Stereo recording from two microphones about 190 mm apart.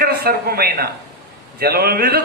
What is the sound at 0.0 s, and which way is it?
A man's voice, 55° right (ahead or behind).